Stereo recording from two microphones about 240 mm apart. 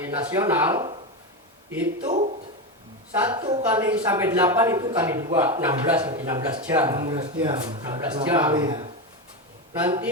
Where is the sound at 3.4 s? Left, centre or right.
Centre.